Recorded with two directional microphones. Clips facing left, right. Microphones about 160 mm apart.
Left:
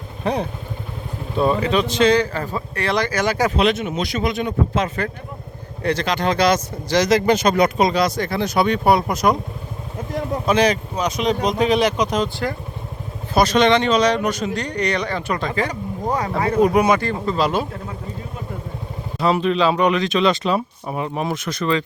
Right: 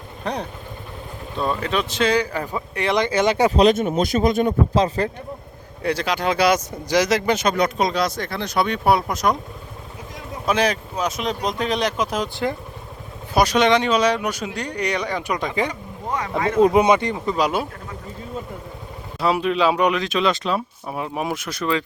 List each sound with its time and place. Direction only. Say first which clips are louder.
0.2 s speech: left 5 dB; 5° left (ahead or behind)
1.6 s speech: left 5 dB; centre (ahead or behind); by 3.5 s 25° right (ahead or behind)
3.5 s speech: right 3 dB; 40° right (ahead or behind)
5.8 s speech: left 2 dB; 5° right (ahead or behind)
10.4 s speech: left 2 dB; 5° right (ahead or behind)
13.3 s speech: left 1 dB; 10° right (ahead or behind)
16.0 s a sound: left 4 dB; 35° left (ahead or behind)
16.6 s speech: right 1 dB; 25° right (ahead or behind)
19.2 s speech: left 1 dB; 5° right (ahead or behind)